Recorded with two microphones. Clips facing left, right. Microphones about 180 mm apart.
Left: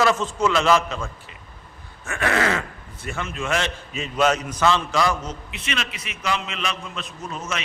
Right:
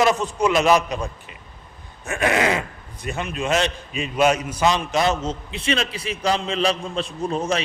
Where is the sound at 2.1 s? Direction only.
20° right (ahead or behind).